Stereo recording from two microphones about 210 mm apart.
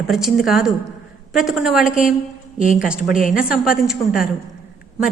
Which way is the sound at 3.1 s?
40° left (ahead or behind).